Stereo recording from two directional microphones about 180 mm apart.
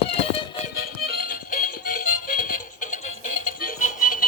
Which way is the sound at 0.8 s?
55° left (ahead or behind).